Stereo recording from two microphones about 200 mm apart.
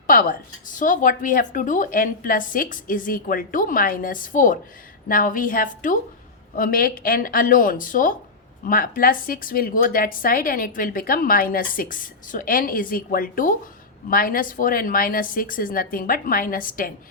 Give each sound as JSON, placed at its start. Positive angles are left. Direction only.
{"t": 0.1, "sound": "a woman's voice", "side_deg": 45}